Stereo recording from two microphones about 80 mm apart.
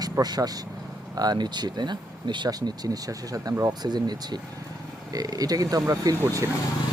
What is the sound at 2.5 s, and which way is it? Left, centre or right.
Speech, right.